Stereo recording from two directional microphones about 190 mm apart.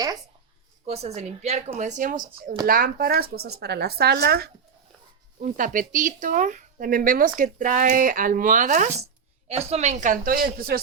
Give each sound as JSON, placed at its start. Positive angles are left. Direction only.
{"t": 0.9, "sound": "speech", "side_deg": -35}
{"t": 5.4, "sound": "speech", "side_deg": -45}